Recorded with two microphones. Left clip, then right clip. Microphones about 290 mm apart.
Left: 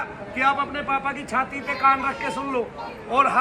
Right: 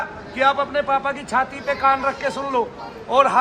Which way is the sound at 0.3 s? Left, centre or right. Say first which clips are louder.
Right 4 dB; right.